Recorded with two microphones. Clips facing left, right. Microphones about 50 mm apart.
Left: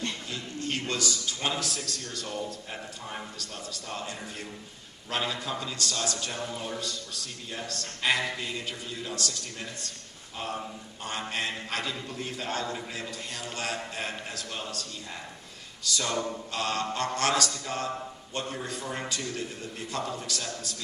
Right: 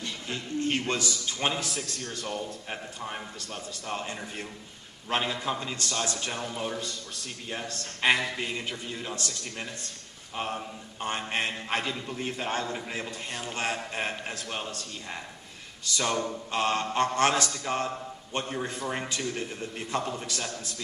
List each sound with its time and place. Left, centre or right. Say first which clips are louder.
0.3 s a man's voice: right 4 dB; right